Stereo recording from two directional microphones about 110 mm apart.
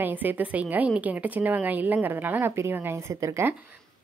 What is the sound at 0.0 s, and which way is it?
A woman's voice, 15° right (ahead or behind).